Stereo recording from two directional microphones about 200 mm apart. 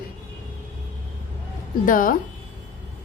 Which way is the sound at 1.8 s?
45° left (ahead or behind).